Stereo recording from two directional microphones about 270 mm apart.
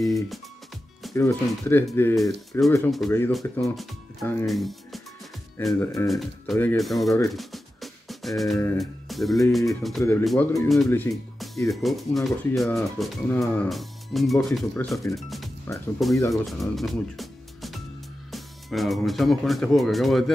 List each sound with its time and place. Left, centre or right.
1.1 s speech: centre
15.1 s music: centre
16.0 s speech: centre